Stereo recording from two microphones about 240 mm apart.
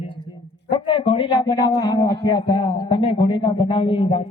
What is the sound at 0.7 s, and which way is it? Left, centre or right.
A man's voice, centre.